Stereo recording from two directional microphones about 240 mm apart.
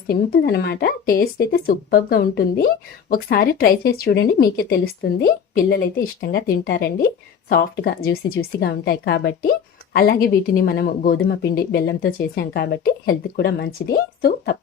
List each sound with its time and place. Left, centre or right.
0.1 s speech: left